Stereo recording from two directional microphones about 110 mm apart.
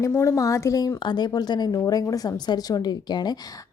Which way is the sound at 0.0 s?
25° left (ahead or behind).